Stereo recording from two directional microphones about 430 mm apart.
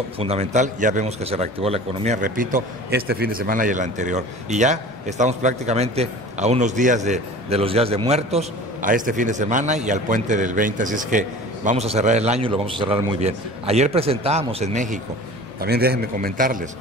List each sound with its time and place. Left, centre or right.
0.2 s a man's voice: centre